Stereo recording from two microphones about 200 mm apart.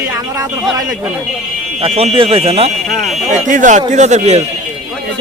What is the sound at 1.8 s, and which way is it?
Speech, 30° right (ahead or behind).